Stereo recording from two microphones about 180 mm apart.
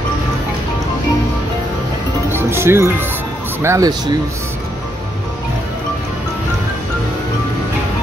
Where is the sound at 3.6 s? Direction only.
15° right (ahead or behind).